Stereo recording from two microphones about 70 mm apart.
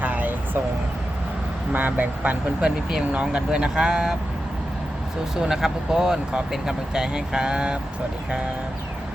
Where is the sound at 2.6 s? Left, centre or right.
Centre.